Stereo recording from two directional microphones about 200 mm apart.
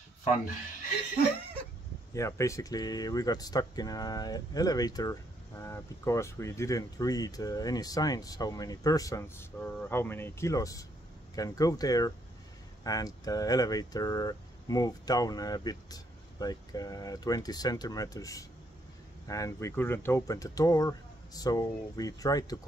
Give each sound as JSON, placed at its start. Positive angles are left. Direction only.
{"t": 2.1, "sound": "speech", "side_deg": 15}